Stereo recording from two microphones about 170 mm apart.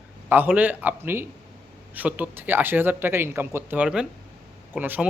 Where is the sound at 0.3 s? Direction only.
10° right (ahead or behind).